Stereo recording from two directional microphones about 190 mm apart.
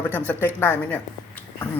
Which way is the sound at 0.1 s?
10° left (ahead or behind).